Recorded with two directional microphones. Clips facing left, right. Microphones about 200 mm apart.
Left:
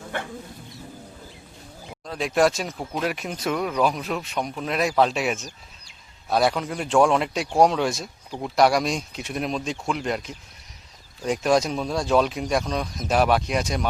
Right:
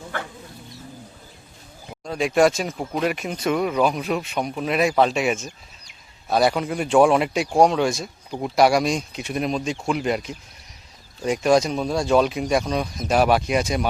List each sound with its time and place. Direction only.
2.0 s speech: centre (ahead or behind)